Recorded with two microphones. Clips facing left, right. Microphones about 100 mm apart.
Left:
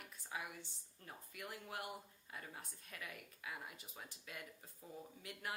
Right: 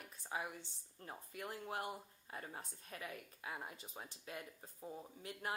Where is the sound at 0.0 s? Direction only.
35° right (ahead or behind).